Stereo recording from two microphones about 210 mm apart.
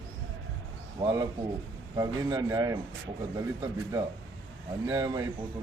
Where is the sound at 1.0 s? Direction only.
20° right (ahead or behind).